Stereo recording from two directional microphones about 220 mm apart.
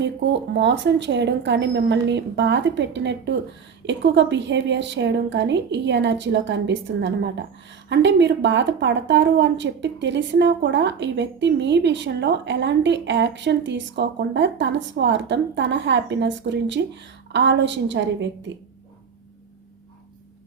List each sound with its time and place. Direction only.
0.0 s speech: 50° right (ahead or behind)